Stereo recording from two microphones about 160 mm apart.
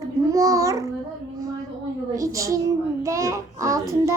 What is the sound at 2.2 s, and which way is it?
Child singing, 20° right (ahead or behind).